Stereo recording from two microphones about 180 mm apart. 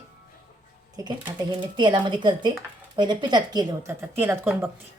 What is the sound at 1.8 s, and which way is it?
A woman's voice, 25° right (ahead or behind).